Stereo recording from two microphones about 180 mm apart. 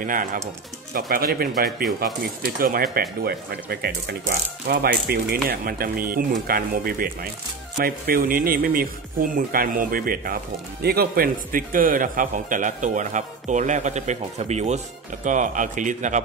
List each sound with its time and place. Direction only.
0.0 s speech: 50° right (ahead or behind)